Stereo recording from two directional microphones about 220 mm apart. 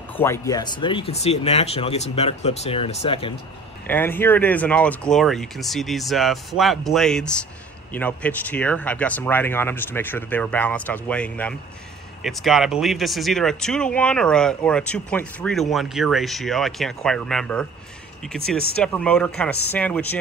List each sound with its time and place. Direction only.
0.2 s speech: 15° left (ahead or behind)
3.8 s speech: 10° left (ahead or behind)